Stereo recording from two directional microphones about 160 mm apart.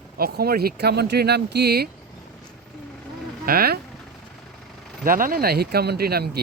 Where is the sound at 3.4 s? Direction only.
70° right (ahead or behind).